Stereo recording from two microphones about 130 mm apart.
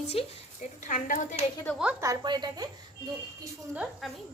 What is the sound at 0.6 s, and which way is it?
Speech, 75° left (ahead or behind).